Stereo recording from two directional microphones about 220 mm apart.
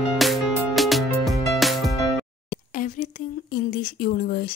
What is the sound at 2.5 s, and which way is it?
A woman's voice, 40° left (ahead or behind).